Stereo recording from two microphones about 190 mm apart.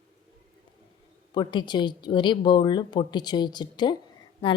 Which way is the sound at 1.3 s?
25° left (ahead or behind).